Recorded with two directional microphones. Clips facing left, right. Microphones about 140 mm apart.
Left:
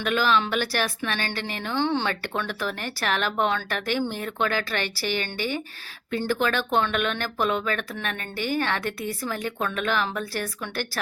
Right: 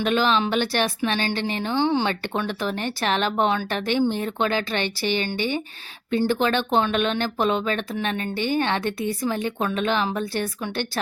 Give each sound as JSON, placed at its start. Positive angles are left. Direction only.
{"t": 0.0, "sound": "speech", "side_deg": -25}